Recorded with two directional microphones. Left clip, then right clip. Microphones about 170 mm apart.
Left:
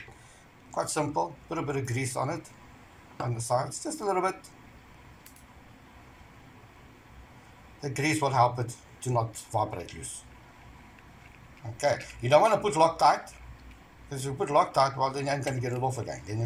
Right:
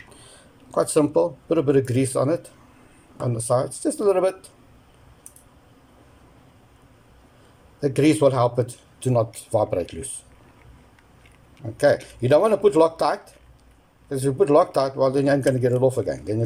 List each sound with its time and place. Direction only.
0.7 s speech: 50° right (ahead or behind)
7.8 s speech: 55° right (ahead or behind)
11.8 s speech: 55° right (ahead or behind)